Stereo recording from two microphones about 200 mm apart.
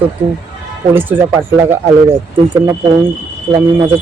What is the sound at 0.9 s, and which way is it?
Speech, 10° right (ahead or behind).